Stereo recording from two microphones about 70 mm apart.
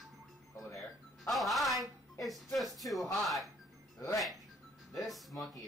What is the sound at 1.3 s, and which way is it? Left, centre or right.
Speech, centre.